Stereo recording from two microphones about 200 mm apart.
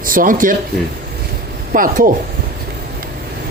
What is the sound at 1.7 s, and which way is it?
Speech, 45° right (ahead or behind).